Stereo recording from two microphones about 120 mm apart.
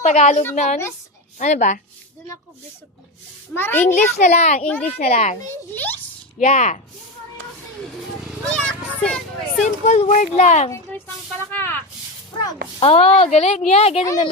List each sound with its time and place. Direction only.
0.0 s speech: 85° left
1.4 s a woman's voice: 90° left
3.5 s a child's voice: 15° left (ahead or behind)
3.9 s speech: 75° left (ahead or behind)
4.6 s a child's voice: 10° left (ahead or behind)
4.9 s speech: 70° left (ahead or behind)
6.4 s speech: 80° left
8.4 s a child's voice: 5° left (ahead or behind)
9.6 s speech: 80° left
10.7 s a child's voice: 20° left (ahead or behind)
12.8 s speech: 60° left (ahead or behind)